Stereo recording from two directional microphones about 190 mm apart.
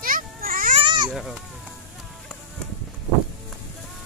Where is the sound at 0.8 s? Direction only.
25° right (ahead or behind).